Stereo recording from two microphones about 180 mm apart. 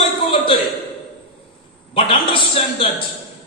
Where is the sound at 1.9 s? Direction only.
30° left (ahead or behind).